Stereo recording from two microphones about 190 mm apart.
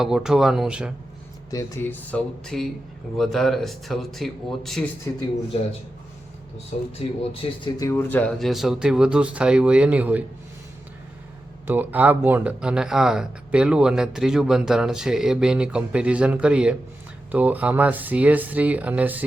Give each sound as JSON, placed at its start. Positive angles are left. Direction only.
{"t": 0.0, "sound": "speech", "side_deg": -5}
{"t": 1.5, "sound": "speech", "side_deg": 15}
{"t": 7.0, "sound": "speech", "side_deg": 30}
{"t": 7.6, "sound": "speech", "side_deg": 15}
{"t": 11.6, "sound": "speech", "side_deg": -10}